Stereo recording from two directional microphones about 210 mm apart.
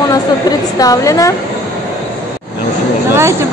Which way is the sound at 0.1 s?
15° left (ahead or behind).